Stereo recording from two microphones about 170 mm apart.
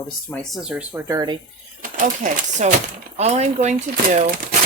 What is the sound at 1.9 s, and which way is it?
Speech, 50° right (ahead or behind).